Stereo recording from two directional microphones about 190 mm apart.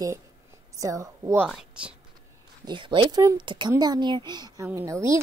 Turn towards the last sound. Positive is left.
turn(degrees=-15)  # may be behind; listen again after turning